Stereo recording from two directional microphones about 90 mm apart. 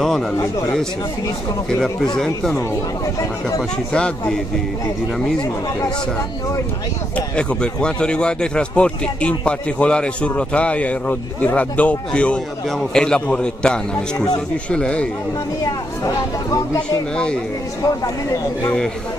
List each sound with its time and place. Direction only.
2.1 s speech: 5° left (ahead or behind)
7.2 s speech: 10° left (ahead or behind)
15.6 s speech: 40° left (ahead or behind)